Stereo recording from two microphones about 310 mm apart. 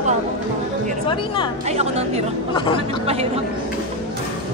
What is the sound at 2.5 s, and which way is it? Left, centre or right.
Speech, centre.